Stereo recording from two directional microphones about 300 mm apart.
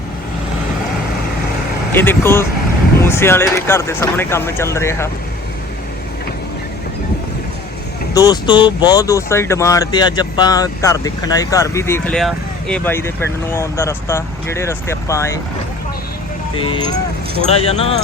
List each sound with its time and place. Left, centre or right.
2.0 s speech: centre
8.1 s speech: centre
17.5 s speech: centre